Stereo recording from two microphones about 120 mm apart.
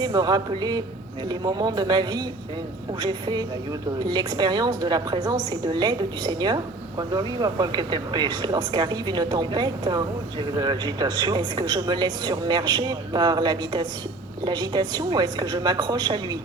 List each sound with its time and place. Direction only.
0.0 s speech: 35° right (ahead or behind)